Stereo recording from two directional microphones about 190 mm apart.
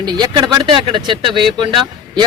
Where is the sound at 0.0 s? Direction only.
20° right (ahead or behind).